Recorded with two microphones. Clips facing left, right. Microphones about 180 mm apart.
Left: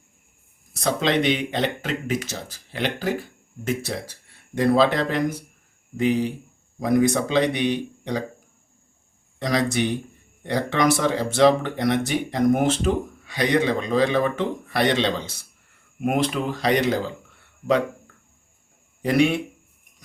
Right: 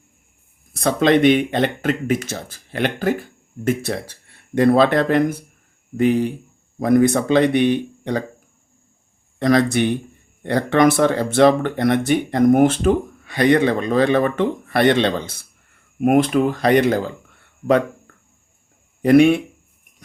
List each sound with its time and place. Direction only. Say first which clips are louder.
0.7 s speech: right 6 dB; 55° right (ahead or behind)
9.4 s speech: right 6 dB; 55° right (ahead or behind)
19.0 s speech: right 8 dB; 55° right (ahead or behind)